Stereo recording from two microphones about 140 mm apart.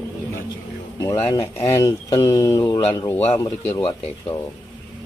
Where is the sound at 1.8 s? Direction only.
25° left (ahead or behind).